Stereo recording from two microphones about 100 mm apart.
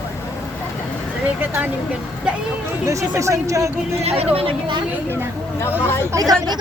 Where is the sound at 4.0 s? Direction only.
90° right.